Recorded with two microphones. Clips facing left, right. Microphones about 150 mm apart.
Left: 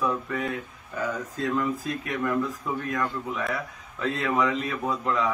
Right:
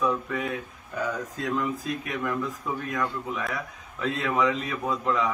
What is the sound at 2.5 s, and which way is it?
A man's voice, centre (ahead or behind).